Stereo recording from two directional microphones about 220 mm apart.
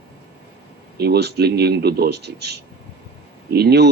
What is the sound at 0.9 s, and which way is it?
Speech, 45° right (ahead or behind).